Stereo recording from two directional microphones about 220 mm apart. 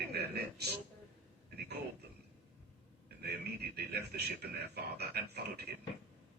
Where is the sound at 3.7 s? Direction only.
45° right (ahead or behind).